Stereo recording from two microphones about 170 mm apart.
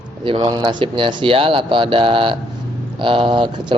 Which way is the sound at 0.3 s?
25° right (ahead or behind).